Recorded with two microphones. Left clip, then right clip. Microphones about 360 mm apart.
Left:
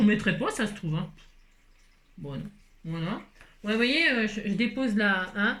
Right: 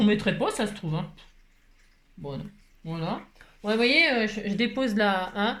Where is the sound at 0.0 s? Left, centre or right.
Centre.